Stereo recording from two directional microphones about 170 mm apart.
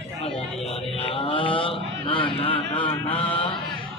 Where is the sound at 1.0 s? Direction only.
30° left (ahead or behind).